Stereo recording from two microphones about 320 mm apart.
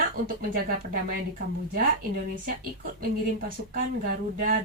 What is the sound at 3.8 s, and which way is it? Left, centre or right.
Speech, right.